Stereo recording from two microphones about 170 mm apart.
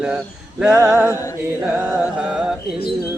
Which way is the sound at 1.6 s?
10° right (ahead or behind).